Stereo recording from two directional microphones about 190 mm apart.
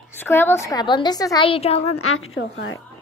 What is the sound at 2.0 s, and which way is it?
Speech, 90° left.